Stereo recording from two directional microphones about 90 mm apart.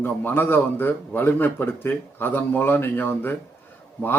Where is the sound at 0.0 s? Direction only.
20° left (ahead or behind).